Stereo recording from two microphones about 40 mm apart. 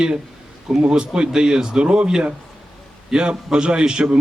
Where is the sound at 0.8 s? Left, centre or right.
Right.